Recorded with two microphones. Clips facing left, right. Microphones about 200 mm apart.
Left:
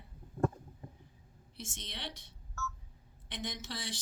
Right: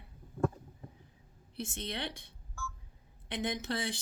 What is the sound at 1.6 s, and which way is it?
Speech, 60° right (ahead or behind).